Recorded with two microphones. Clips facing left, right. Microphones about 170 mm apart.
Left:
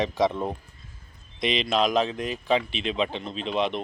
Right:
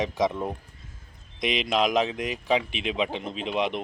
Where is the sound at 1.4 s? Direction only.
15° right (ahead or behind).